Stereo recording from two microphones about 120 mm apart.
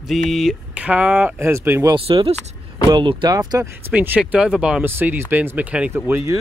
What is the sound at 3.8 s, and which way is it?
Speech, 15° right (ahead or behind).